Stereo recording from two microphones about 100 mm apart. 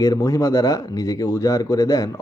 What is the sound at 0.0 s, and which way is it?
Speech, 35° left (ahead or behind).